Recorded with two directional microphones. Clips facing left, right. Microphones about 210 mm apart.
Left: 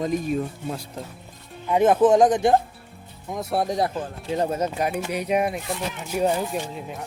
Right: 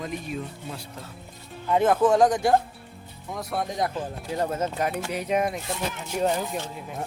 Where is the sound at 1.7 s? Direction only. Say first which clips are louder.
Left 3 dB; 20° left (ahead or behind).